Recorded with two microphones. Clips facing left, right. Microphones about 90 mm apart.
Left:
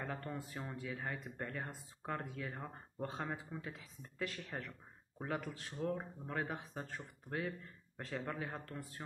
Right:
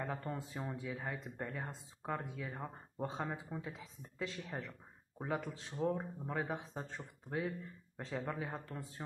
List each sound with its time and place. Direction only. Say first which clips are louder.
0.1 s speech: right 2 dB; 15° right (ahead or behind)